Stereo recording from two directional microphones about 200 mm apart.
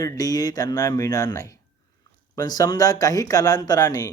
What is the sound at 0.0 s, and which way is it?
Speech, 20° left (ahead or behind).